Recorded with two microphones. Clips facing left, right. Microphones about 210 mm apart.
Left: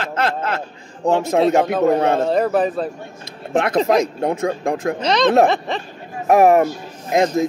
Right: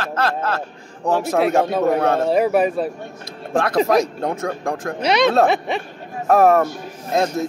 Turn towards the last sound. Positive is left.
turn(degrees=15)  # may be behind; listen again after turning